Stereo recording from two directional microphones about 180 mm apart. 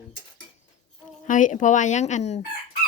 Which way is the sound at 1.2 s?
45° left (ahead or behind).